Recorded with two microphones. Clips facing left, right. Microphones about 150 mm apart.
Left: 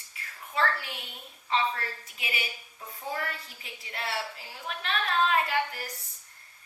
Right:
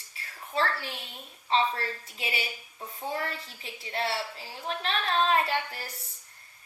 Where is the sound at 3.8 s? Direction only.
30° right (ahead or behind).